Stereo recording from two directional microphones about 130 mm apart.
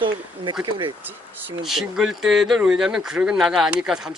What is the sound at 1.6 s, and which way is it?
Speech, 5° right (ahead or behind).